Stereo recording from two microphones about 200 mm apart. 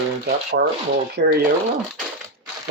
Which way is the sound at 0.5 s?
60° right (ahead or behind).